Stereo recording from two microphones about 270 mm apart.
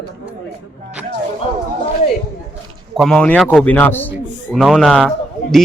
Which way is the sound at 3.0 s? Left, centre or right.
Centre.